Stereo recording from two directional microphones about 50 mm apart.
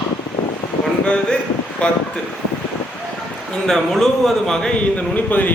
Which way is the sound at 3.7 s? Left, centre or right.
Centre.